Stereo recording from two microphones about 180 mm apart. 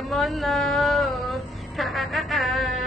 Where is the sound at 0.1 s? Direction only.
Centre (ahead or behind).